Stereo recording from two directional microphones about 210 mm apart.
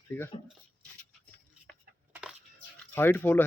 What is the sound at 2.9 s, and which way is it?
Speech, 10° left (ahead or behind).